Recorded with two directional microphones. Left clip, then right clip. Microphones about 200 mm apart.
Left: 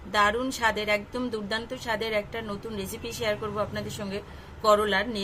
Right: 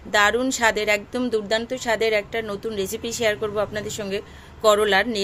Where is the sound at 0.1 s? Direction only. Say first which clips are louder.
Right 5 dB; 40° right (ahead or behind).